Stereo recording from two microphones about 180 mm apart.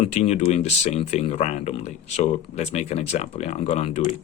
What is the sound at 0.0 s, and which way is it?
Speech, 35° left (ahead or behind).